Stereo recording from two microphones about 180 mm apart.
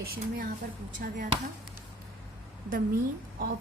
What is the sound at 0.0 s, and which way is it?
Speech, 60° right (ahead or behind).